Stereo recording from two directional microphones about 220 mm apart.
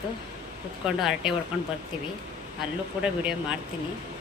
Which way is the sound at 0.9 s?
Centre (ahead or behind).